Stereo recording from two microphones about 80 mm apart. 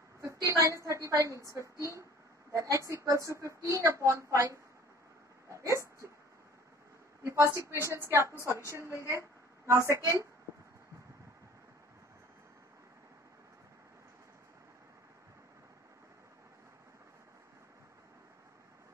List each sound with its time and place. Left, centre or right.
0.2 s a woman's voice: right
5.5 s a sound: right
7.2 s a woman's voice: right